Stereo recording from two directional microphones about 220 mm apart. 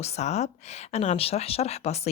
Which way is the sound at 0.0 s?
30° left (ahead or behind).